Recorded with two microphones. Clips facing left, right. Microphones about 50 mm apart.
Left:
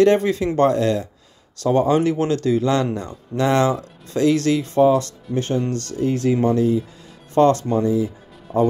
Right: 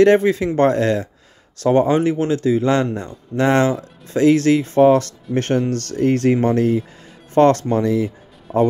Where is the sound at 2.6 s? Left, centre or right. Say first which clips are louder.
Right 2 dB; right.